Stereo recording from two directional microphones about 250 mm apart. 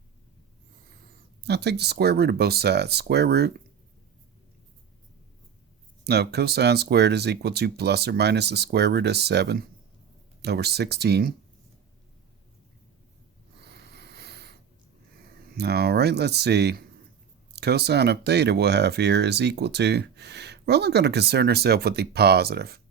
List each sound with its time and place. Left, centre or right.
1.5 s speech: right
6.1 s speech: right
13.6 s snort: right
15.5 s speech: right